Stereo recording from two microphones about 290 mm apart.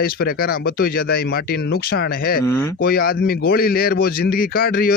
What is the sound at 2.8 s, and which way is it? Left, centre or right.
A man's voice, left.